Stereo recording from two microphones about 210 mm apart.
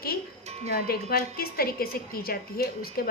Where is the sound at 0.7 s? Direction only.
45° left (ahead or behind).